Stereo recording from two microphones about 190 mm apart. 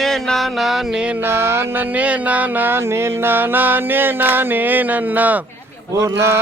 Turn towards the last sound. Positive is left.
turn(degrees=-15)  # may be behind; listen again after turning